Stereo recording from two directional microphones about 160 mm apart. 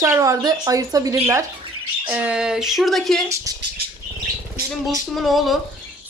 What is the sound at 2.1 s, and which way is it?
Speech, 10° right (ahead or behind).